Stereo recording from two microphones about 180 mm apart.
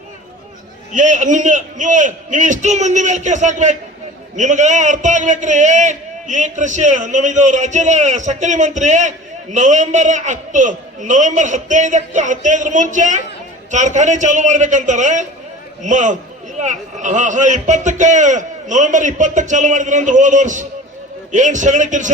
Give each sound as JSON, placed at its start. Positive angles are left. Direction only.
{"t": 0.9, "sound": "a man's voice", "side_deg": -45}